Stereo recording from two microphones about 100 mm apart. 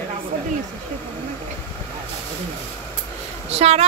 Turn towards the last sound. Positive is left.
turn(degrees=-90)